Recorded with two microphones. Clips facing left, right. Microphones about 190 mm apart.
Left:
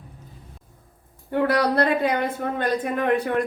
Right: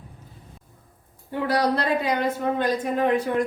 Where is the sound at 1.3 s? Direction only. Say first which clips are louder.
Left 2 dB; 60° left (ahead or behind).